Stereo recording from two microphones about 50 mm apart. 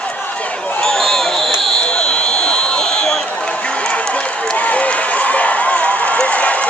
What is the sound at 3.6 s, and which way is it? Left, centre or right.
Run, left.